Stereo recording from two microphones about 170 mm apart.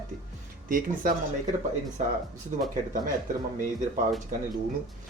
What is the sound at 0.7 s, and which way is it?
Speech, 55° right (ahead or behind).